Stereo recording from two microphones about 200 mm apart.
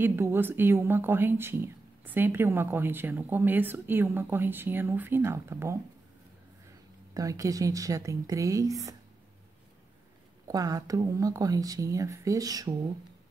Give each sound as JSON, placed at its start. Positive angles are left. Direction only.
{"t": 0.0, "sound": "speech", "side_deg": -10}
{"t": 7.2, "sound": "speech", "side_deg": -15}
{"t": 10.4, "sound": "speech", "side_deg": -15}